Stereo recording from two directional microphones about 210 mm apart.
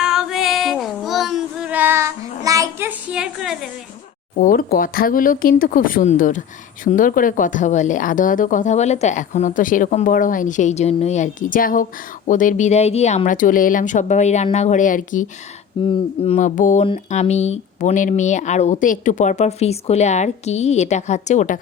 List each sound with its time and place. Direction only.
0.0 s child singing: centre (ahead or behind)
4.4 s a woman's voice: 40° left (ahead or behind)
15.8 s a woman's voice: 25° left (ahead or behind)